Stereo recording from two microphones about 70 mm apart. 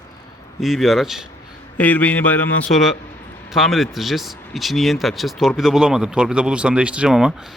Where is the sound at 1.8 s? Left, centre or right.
Left.